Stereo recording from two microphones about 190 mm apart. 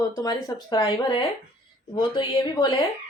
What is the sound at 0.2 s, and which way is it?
Speech, 20° left (ahead or behind).